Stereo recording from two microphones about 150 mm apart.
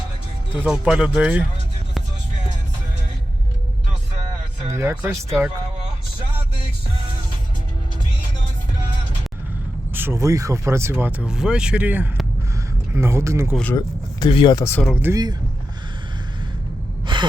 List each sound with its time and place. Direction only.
0.5 s speech: 10° right (ahead or behind)
4.7 s speech: 20° right (ahead or behind)
9.9 s speech: 15° right (ahead or behind)
13.7 s speech: 30° left (ahead or behind)
14.6 s speech: 15° left (ahead or behind)
15.1 s speech: 25° right (ahead or behind)